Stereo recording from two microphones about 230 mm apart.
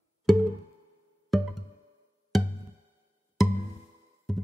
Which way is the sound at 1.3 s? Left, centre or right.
Centre.